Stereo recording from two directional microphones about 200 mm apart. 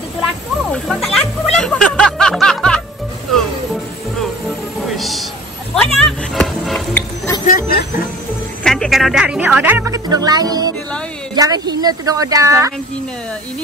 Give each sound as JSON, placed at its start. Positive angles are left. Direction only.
{"t": 0.7, "sound": "music", "side_deg": 0}
{"t": 4.8, "sound": "a sound", "side_deg": 0}
{"t": 5.9, "sound": "music", "side_deg": 0}
{"t": 7.4, "sound": "vehicle", "side_deg": 45}
{"t": 8.6, "sound": "music", "side_deg": 5}
{"t": 11.3, "sound": "speech", "side_deg": -20}